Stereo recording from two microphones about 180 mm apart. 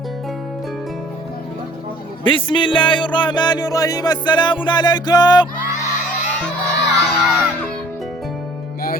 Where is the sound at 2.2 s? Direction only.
30° left (ahead or behind).